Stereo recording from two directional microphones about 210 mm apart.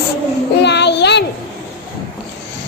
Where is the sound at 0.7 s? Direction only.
55° left (ahead or behind).